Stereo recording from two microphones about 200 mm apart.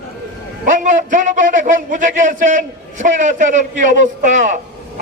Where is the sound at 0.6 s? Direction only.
40° right (ahead or behind).